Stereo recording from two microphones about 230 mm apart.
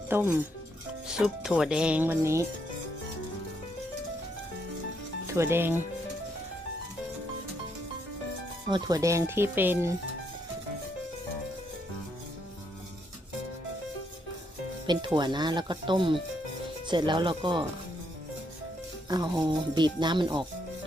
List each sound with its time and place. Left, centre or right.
0.1 s speech: centre
5.2 s speech: centre
8.7 s speech: centre
14.8 s speech: centre
19.0 s speech: centre